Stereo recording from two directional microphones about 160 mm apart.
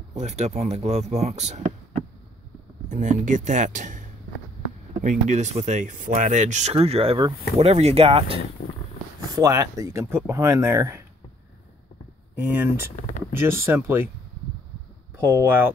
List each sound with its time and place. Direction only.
0.1 s speech: 40° right (ahead or behind)
5.3 s speech: 45° right (ahead or behind)
9.3 s speech: 20° right (ahead or behind)
12.4 s speech: 10° right (ahead or behind)
15.1 s speech: 15° right (ahead or behind)